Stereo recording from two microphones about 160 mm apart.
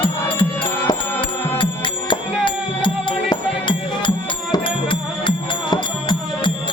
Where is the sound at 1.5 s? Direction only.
30° left (ahead or behind).